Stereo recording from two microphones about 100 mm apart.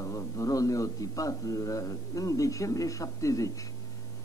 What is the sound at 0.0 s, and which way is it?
Speech, 30° left (ahead or behind).